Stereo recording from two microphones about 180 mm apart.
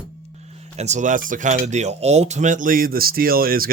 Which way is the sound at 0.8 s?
40° right (ahead or behind).